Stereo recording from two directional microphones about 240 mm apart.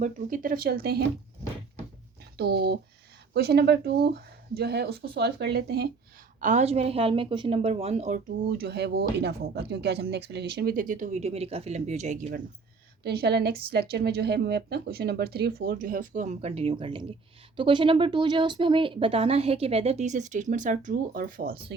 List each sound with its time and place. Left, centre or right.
0.0 s a woman's voice: right
2.4 s a woman's voice: right
6.4 s speech: right
8.4 s a woman's voice: right
13.0 s a woman's voice: right